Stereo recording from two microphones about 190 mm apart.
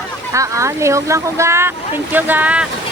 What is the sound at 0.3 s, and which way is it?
Speech, 15° right (ahead or behind).